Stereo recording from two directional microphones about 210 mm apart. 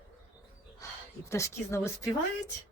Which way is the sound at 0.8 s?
15° left (ahead or behind).